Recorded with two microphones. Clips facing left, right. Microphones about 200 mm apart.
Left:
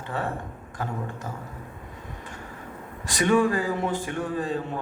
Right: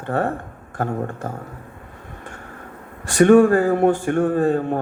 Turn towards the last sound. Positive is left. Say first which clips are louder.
# right 9 dB
turn(degrees=-55)  # may be behind; listen again after turning